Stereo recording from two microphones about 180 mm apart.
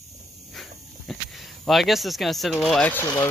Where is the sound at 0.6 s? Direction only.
Centre (ahead or behind).